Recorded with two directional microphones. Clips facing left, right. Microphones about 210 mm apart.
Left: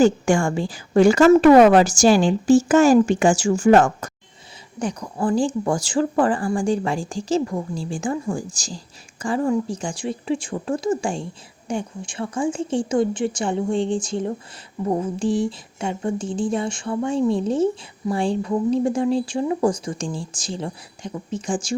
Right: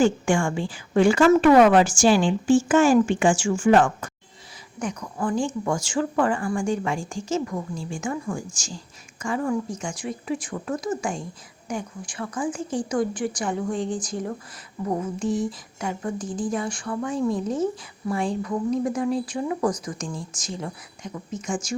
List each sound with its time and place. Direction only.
0.0 s a woman's voice: 40° left (ahead or behind)